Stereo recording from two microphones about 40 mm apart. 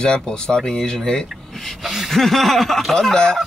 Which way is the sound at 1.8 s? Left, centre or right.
Centre.